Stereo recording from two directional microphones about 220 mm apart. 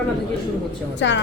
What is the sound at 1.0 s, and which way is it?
Speech, 55° left (ahead or behind).